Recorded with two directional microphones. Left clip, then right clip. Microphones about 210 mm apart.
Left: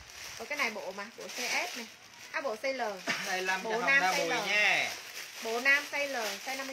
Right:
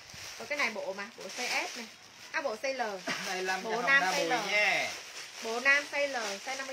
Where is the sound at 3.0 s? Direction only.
25° left (ahead or behind).